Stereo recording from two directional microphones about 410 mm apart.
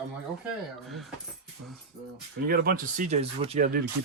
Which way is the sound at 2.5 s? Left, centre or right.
Right.